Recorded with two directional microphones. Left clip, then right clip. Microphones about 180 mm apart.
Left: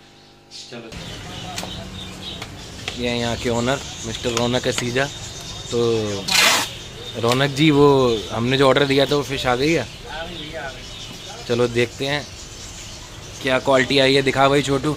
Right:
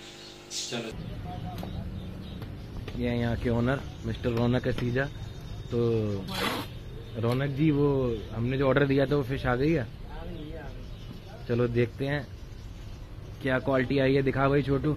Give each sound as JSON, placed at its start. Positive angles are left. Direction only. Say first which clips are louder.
{"t": 3.0, "sound": "speech", "louder": "left 8 dB", "side_deg": 15}
{"t": 7.2, "sound": "speech", "louder": "left 11 dB", "side_deg": 35}
{"t": 8.7, "sound": "speech", "louder": "left 8 dB", "side_deg": 25}
{"t": 11.4, "sound": "speech", "louder": "left 8 dB", "side_deg": 25}
{"t": 13.4, "sound": "speech", "louder": "left 9 dB", "side_deg": 15}
{"t": 13.7, "sound": "speech", "louder": "left 11 dB", "side_deg": 25}